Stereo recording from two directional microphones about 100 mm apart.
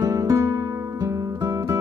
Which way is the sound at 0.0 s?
35° right (ahead or behind).